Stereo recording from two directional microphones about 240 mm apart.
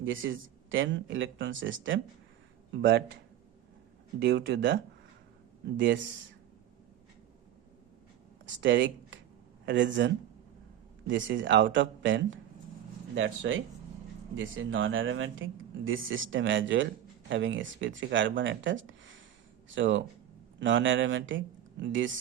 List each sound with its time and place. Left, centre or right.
0.0 s speech: right
4.2 s speech: right
8.4 s speech: right
11.1 s speech: right